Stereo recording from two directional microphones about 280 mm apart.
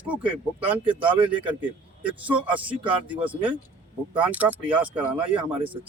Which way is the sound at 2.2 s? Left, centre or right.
Centre.